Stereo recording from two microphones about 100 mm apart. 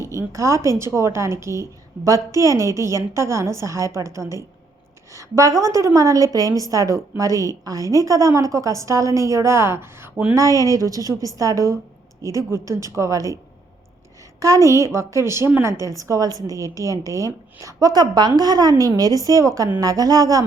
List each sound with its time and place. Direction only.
0.0 s a woman's voice: 30° right (ahead or behind)